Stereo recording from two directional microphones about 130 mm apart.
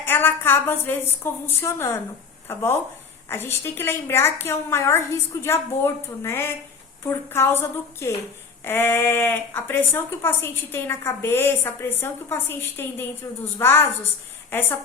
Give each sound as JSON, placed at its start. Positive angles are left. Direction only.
{"t": 0.0, "sound": "a woman's voice", "side_deg": 15}